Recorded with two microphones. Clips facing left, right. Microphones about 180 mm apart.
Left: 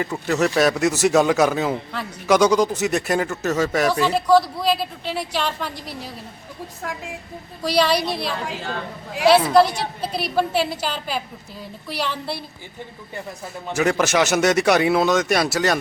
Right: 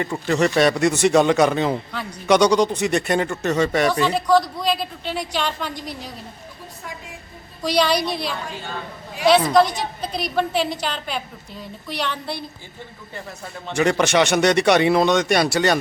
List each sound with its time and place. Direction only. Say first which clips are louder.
0.0 s a man's voice: right 1 dB; 5° left (ahead or behind)
6.8 s a woman's voice: left 5 dB; 90° left
7.6 s a man's voice: even; 5° left (ahead or behind)
9.2 s a man's voice: left 1 dB; 5° left (ahead or behind)
13.7 s a man's voice: right 1 dB; 5° left (ahead or behind)